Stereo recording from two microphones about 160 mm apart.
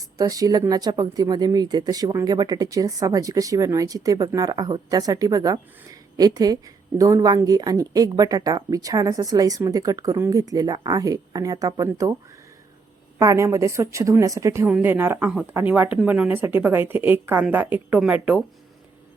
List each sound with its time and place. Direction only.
0.2 s speech: 20° right (ahead or behind)
13.1 s speech: 20° right (ahead or behind)